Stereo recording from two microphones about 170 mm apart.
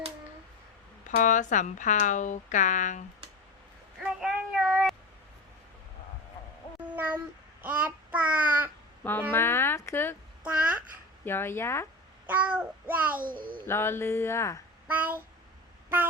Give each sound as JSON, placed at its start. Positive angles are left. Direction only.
{"t": 1.1, "sound": "speech", "side_deg": 50}
{"t": 4.0, "sound": "a sound", "side_deg": -5}
{"t": 6.9, "sound": "cat", "side_deg": -10}
{"t": 7.6, "sound": "child singing", "side_deg": -10}
{"t": 9.3, "sound": "a sound", "side_deg": 15}
{"t": 10.4, "sound": "babbling", "side_deg": -10}
{"t": 11.3, "sound": "speech", "side_deg": 15}
{"t": 12.2, "sound": "child singing", "side_deg": -10}
{"t": 13.3, "sound": "a child's voice", "side_deg": -30}
{"t": 13.7, "sound": "speech", "side_deg": 15}
{"t": 14.8, "sound": "child singing", "side_deg": -10}